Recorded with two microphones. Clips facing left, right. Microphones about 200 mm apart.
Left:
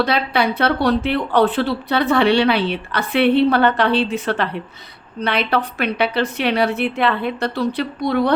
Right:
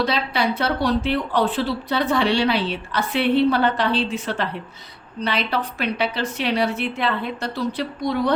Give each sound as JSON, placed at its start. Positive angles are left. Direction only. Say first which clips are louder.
{"t": 0.0, "sound": "a woman's voice", "louder": "left 3 dB", "side_deg": 60}